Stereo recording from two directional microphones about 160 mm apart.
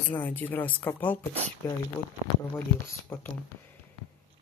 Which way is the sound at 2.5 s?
15° left (ahead or behind).